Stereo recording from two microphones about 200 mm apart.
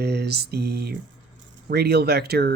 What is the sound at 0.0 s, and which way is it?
Speech, 55° right (ahead or behind).